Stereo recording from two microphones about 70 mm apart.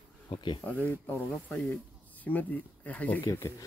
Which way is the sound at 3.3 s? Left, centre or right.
Left.